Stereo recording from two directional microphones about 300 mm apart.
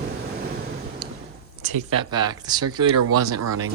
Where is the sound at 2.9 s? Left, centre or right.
Right.